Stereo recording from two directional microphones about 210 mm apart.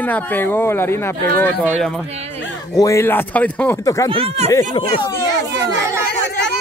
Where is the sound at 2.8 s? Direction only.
15° left (ahead or behind).